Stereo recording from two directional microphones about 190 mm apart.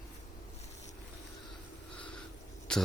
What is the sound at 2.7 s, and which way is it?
Speech, 5° left (ahead or behind).